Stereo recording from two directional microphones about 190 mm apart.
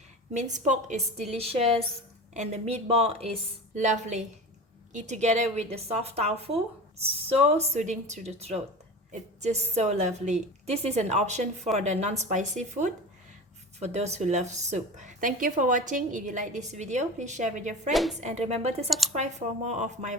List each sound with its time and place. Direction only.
0.3 s a woman's voice: 40° right (ahead or behind)
17.9 s a woman's voice: centre (ahead or behind)
18.2 s a woman's voice: 35° right (ahead or behind)
18.9 s speech: centre (ahead or behind)
19.1 s a woman's voice: 35° right (ahead or behind)